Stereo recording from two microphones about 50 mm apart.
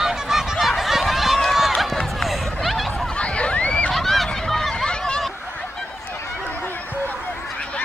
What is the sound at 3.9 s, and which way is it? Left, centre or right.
Honk, centre.